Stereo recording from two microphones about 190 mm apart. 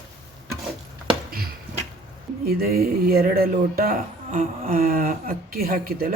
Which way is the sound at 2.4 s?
55° right (ahead or behind).